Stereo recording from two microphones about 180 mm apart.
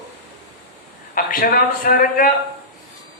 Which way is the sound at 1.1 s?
50° left (ahead or behind).